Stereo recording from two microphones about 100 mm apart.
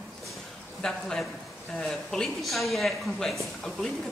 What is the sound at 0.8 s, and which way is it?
Speech, 5° left (ahead or behind).